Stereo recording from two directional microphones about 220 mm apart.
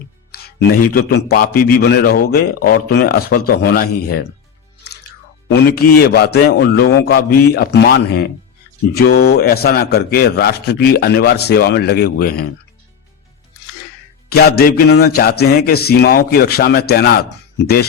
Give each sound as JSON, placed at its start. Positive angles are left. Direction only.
{"t": 0.3, "sound": "a man's voice", "side_deg": 40}
{"t": 5.6, "sound": "a man's voice", "side_deg": 45}
{"t": 14.3, "sound": "a man's voice", "side_deg": 45}